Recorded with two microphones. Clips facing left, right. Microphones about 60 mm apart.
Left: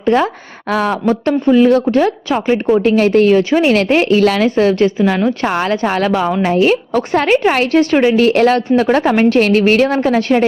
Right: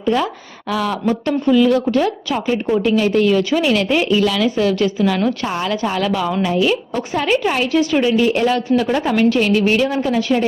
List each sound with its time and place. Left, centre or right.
0.0 s a woman's voice: left
5.5 s a woman's voice: left